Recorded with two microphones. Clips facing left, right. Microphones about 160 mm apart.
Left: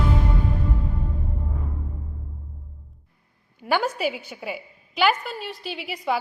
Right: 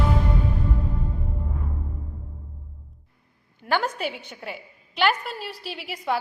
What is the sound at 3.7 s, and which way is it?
A woman's voice, 10° left (ahead or behind).